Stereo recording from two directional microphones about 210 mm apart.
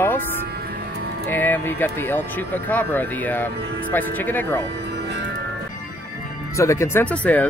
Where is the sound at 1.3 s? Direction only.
10° left (ahead or behind).